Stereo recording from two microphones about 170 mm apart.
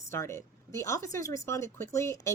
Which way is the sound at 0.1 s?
15° left (ahead or behind).